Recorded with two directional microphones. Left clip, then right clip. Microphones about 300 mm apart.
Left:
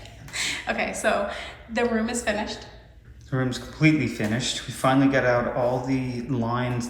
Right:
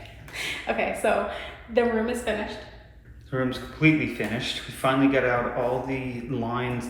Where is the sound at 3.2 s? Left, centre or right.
Centre.